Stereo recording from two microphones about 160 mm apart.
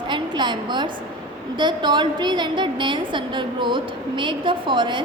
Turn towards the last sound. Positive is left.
turn(degrees=-30)  # may be behind; listen again after turning